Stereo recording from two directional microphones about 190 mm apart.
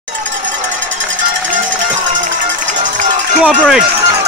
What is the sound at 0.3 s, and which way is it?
Cowbell, 75° right (ahead or behind).